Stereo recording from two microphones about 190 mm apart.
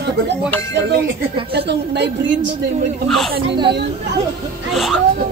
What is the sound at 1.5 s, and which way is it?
Speech, 65° right (ahead or behind).